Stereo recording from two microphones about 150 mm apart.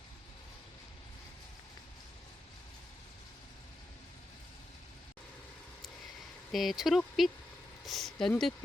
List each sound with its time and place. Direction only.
6.5 s speech: centre (ahead or behind)